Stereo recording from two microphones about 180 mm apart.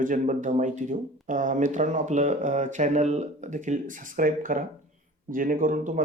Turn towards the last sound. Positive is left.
turn(degrees=-45)  # may be behind; listen again after turning